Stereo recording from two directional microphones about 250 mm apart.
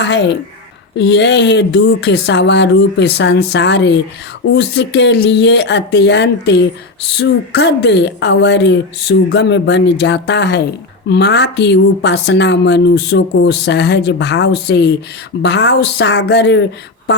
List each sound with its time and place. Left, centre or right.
0.0 s speech: left